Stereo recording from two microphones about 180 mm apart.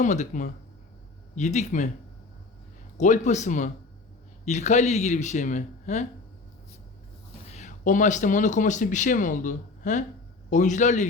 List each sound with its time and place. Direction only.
0.0 s speech: 40° left (ahead or behind)
3.0 s speech: 40° left (ahead or behind)
7.4 s speech: 40° left (ahead or behind)